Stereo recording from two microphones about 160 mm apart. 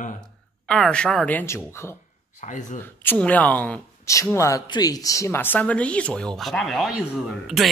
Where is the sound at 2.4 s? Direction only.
50° left (ahead or behind).